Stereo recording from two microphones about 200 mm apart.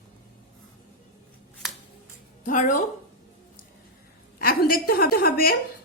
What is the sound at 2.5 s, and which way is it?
Speech, 40° left (ahead or behind).